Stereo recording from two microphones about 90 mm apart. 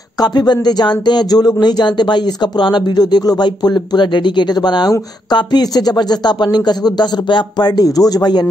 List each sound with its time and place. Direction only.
0.2 s speech: 50° left (ahead or behind)